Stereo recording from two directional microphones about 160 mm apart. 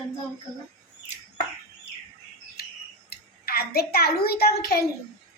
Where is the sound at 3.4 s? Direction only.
75° left (ahead or behind).